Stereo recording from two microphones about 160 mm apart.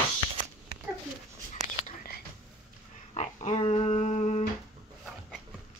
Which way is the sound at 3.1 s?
45° left (ahead or behind).